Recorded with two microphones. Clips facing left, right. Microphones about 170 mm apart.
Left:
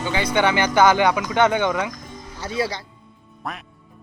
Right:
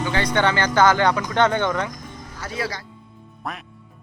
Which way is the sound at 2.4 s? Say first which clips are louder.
Left 4 dB; 30° left (ahead or behind).